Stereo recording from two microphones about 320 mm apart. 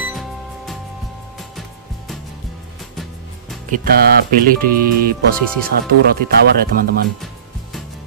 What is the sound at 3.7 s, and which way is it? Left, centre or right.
Speech, right.